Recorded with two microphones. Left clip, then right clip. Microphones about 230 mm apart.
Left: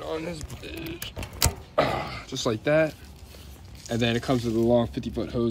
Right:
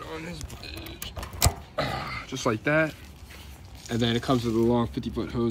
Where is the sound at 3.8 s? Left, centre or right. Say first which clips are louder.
Left 1 dB; centre.